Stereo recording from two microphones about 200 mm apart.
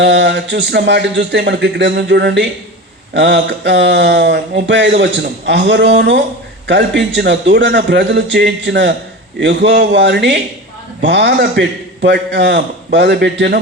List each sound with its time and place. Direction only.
0.0 s a man's voice: 60° right (ahead or behind)